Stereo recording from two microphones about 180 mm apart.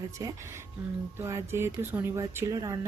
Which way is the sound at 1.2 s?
15° right (ahead or behind).